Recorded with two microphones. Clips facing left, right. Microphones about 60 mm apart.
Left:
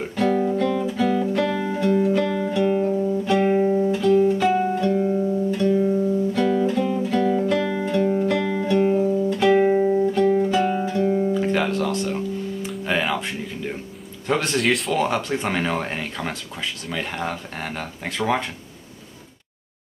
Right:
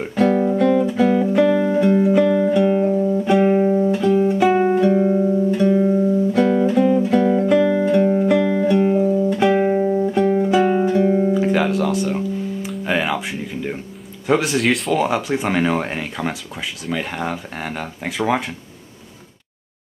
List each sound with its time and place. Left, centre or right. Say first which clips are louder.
0.0 s guitar: right 4 dB; centre
4.9 s music: right 4 dB; right
6.3 s music: right 4 dB; centre
10.1 s music: right 2 dB; centre
11.3 s guitar: right 4 dB; centre
14.2 s speech: right 4 dB; centre